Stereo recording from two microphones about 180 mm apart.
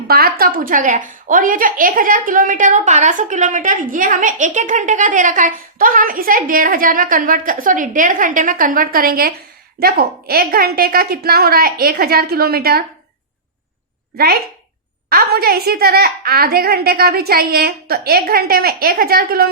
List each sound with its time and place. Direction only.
0.1 s a woman's voice: 55° right (ahead or behind)
15.1 s a woman's voice: 60° right (ahead or behind)